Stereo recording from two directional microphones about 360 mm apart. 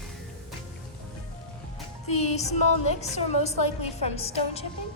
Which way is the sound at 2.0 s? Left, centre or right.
Centre.